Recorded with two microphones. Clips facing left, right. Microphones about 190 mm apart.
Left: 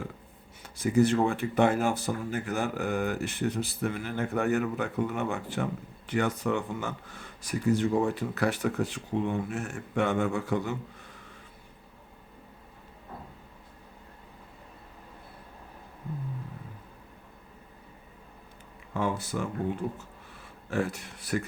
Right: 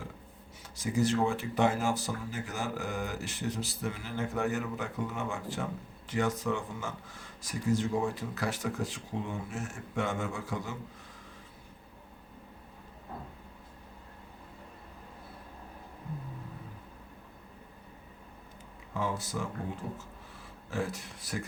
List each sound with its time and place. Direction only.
0.6 s speech: 60° left (ahead or behind)
18.9 s speech: 60° left (ahead or behind)
20.7 s speech: 60° left (ahead or behind)